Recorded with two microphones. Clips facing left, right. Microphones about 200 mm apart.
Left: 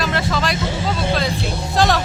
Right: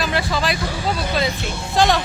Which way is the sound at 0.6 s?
25° left (ahead or behind).